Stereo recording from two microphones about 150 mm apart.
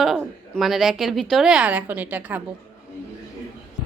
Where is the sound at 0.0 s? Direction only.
Centre (ahead or behind).